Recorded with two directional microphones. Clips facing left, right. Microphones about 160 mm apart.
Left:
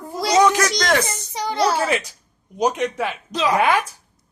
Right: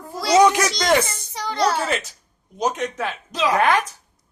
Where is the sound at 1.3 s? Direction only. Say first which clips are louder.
Left 1 dB; 15° left (ahead or behind).